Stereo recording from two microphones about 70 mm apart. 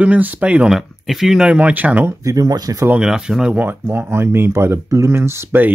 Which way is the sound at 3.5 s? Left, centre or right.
Right.